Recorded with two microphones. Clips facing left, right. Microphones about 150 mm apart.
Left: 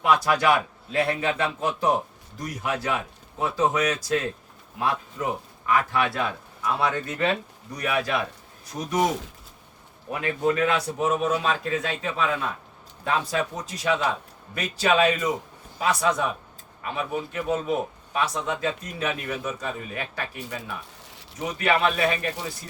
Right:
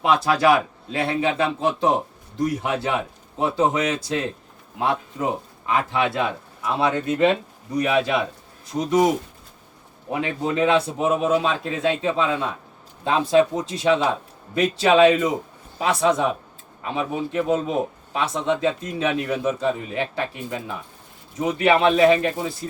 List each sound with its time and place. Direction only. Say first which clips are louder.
0.0 s a man's voice: right 3 dB; 25° right (ahead or behind)
10.1 s a man's voice: even; 25° right (ahead or behind)